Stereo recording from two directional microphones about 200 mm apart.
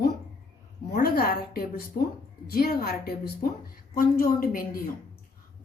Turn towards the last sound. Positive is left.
turn(degrees=45)  # may be behind; listen again after turning